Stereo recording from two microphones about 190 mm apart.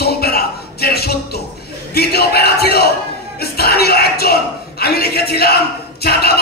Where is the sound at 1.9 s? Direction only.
55° left (ahead or behind).